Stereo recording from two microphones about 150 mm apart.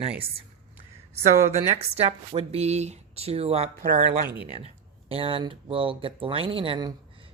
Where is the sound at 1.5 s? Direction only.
45° right (ahead or behind).